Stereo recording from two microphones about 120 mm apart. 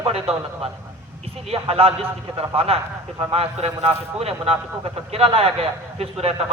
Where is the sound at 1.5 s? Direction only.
55° right (ahead or behind).